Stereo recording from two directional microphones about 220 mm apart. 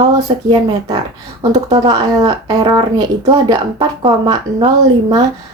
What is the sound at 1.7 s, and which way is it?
A woman's voice, 15° right (ahead or behind).